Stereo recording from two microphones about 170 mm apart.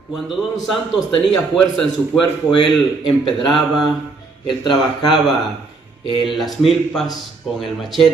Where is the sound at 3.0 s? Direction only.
30° left (ahead or behind).